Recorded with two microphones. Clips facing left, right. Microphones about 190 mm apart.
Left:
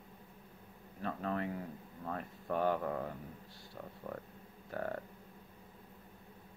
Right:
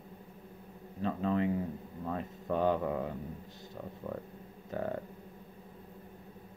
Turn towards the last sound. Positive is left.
turn(degrees=-20)  # may be behind; listen again after turning